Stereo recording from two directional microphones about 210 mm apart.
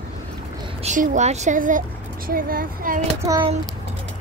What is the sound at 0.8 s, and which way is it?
A woman's voice, 35° right (ahead or behind).